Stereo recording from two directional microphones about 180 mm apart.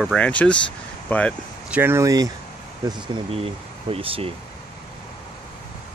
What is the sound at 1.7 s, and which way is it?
Speech, 10° right (ahead or behind).